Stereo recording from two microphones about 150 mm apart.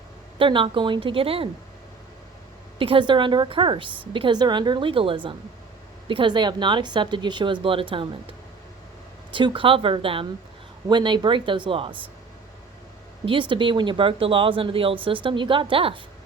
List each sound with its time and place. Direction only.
0.3 s speech: 35° right (ahead or behind)
2.7 s speech: 35° right (ahead or behind)
13.2 s speech: 35° right (ahead or behind)